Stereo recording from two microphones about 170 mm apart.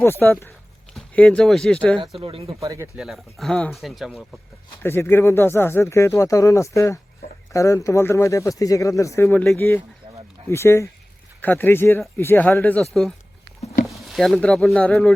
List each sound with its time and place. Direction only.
0.0 s speech: 10° left (ahead or behind)
2.0 s speech: 30° right (ahead or behind)
2.6 s speech: 20° right (ahead or behind); by 4.3 s centre (ahead or behind)
4.8 s speech: 15° left (ahead or behind)